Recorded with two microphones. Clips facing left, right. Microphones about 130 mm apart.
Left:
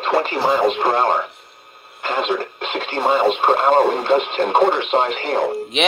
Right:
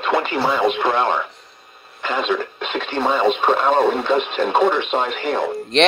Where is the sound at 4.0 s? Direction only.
50° left (ahead or behind).